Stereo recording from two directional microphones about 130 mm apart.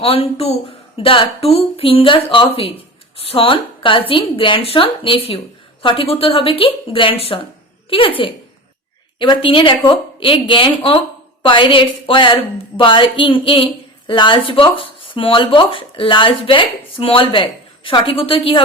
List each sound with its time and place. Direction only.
0.0 s a woman's voice: 45° left (ahead or behind)